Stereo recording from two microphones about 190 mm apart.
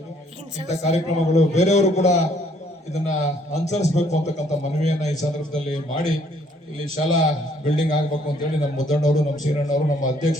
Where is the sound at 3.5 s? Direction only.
35° left (ahead or behind).